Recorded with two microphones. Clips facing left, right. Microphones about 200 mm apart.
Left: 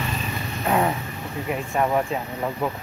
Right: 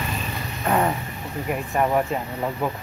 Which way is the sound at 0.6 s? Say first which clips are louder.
Even; centre (ahead or behind).